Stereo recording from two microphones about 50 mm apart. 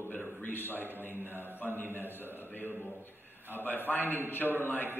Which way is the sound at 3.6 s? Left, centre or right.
Left.